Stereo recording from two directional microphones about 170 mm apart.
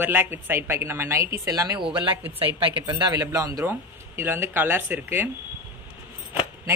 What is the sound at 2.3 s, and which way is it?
Speech, 30° right (ahead or behind).